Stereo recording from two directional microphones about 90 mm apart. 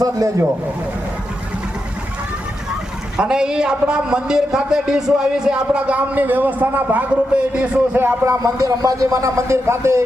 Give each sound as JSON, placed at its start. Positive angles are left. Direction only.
{"t": 0.0, "sound": "speech", "side_deg": -40}
{"t": 3.2, "sound": "a man's voice", "side_deg": -10}